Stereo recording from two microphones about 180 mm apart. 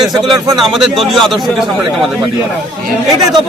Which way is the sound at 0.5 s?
Centre (ahead or behind).